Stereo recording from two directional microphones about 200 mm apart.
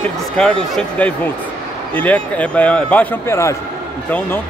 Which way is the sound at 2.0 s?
5° left (ahead or behind).